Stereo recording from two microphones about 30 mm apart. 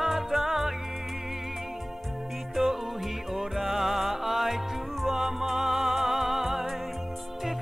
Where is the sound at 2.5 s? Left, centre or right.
Centre.